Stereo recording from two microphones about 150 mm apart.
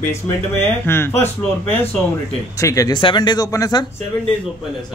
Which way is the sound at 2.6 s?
20° left (ahead or behind).